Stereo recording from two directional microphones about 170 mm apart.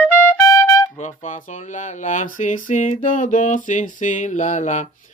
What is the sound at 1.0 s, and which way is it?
Mantra, 45° left (ahead or behind).